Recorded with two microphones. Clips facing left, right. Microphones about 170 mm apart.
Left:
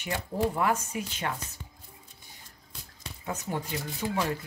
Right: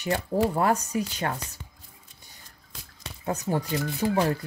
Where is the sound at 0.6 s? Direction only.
40° right (ahead or behind).